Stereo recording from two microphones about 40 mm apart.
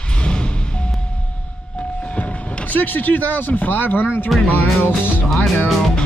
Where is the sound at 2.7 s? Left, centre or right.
Left.